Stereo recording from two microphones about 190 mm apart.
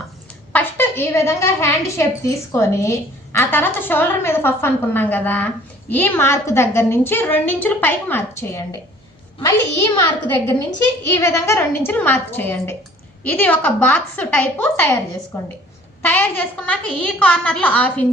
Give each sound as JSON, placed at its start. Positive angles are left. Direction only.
{"t": 0.5, "sound": "a woman's voice", "side_deg": 10}
{"t": 11.0, "sound": "a woman's voice", "side_deg": 15}
{"t": 16.0, "sound": "a woman's voice", "side_deg": 10}